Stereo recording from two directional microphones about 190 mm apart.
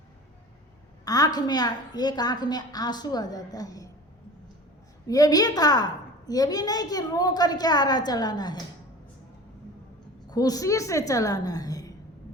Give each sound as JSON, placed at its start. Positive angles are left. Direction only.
{"t": 1.0, "sound": "a woman's voice", "side_deg": 20}
{"t": 5.0, "sound": "a woman's voice", "side_deg": 20}
{"t": 10.2, "sound": "a woman's voice", "side_deg": 20}